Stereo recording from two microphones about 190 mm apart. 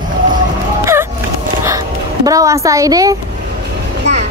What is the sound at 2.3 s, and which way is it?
Speech, 15° right (ahead or behind).